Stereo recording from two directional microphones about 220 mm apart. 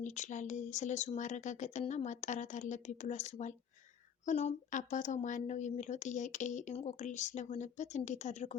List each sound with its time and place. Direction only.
0.0 s speech: 35° left (ahead or behind)